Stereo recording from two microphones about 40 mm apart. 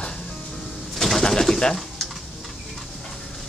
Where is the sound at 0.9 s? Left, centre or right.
Centre.